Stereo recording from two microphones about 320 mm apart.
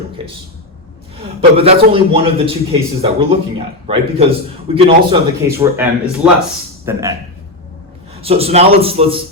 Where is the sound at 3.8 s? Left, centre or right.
Centre.